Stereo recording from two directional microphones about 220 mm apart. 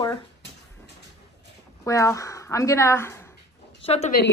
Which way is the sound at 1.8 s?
15° left (ahead or behind).